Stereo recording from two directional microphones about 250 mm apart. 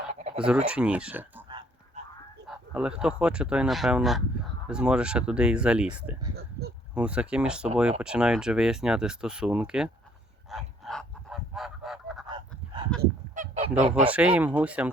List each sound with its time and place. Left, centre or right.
0.1 s a sound: right
0.3 s speech: centre
2.5 s speech: centre
10.5 s goose: centre
13.0 s goose: right
14.0 s speech: centre